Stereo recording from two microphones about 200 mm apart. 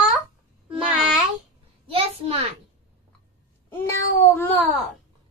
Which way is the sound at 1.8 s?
25° right (ahead or behind).